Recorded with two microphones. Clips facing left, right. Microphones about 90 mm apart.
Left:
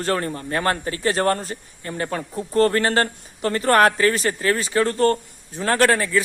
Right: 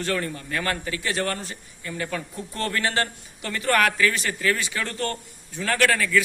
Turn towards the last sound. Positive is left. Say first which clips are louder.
# left 3 dB
turn(degrees=35)  # may be behind; listen again after turning